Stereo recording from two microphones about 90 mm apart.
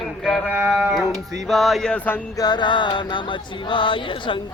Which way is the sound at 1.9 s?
20° left (ahead or behind).